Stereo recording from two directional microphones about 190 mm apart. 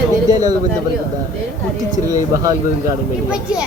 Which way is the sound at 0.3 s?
20° right (ahead or behind).